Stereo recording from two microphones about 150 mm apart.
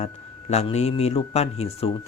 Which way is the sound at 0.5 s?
45° left (ahead or behind).